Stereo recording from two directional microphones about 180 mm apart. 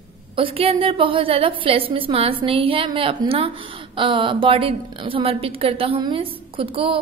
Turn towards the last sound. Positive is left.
turn(degrees=-30)  # may be behind; listen again after turning